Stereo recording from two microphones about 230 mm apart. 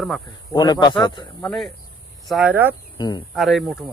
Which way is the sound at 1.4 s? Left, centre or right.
Centre.